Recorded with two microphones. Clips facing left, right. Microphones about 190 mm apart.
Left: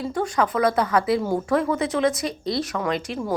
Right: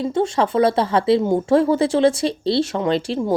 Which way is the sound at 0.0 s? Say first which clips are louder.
Right 4 dB; 25° right (ahead or behind).